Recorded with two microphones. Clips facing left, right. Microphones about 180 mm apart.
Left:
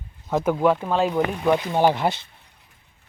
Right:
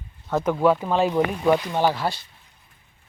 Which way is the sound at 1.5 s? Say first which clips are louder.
Left 2 dB; 15° left (ahead or behind).